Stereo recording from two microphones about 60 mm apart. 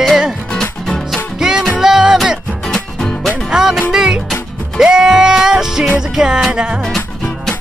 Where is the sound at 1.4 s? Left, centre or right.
Centre.